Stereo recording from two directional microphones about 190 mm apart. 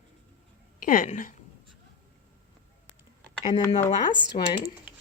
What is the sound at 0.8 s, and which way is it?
Speech, 45° left (ahead or behind).